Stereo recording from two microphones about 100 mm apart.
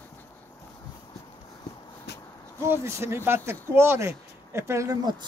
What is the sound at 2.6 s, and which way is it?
Speech, 25° right (ahead or behind).